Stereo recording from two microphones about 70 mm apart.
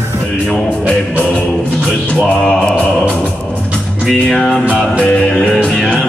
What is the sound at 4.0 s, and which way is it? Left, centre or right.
Music, centre.